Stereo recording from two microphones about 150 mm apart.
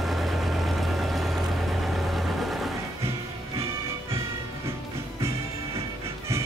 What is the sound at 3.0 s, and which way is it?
Music, 40° right (ahead or behind).